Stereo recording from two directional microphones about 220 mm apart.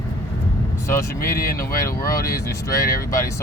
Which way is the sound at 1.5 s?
15° left (ahead or behind).